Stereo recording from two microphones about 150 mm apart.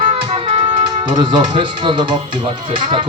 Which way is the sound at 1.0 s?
30° right (ahead or behind).